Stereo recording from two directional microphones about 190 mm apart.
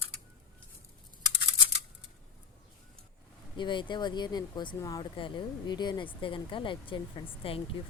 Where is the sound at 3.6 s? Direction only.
25° left (ahead or behind).